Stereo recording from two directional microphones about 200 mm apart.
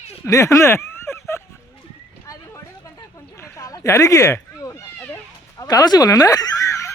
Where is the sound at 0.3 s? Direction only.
15° left (ahead or behind).